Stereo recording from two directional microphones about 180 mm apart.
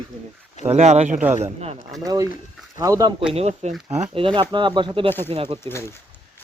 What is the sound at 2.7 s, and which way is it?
Speech, 20° right (ahead or behind).